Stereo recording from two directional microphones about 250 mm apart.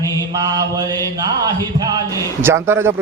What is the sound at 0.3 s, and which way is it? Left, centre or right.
Speech, centre.